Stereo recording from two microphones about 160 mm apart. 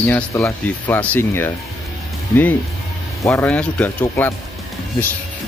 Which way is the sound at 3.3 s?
10° left (ahead or behind).